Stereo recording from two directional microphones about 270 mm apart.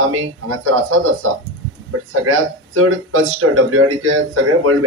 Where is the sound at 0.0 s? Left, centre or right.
Right.